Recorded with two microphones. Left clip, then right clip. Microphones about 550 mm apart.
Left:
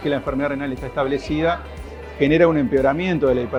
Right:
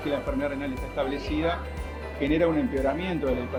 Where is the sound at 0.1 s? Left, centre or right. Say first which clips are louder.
Left 6 dB; left.